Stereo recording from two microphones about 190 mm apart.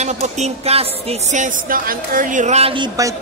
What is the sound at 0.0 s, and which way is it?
Speech, 35° right (ahead or behind).